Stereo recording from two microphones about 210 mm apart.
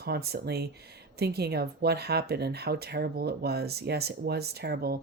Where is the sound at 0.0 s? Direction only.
50° right (ahead or behind).